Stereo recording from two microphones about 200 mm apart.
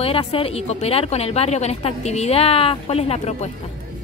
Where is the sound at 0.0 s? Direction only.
30° left (ahead or behind).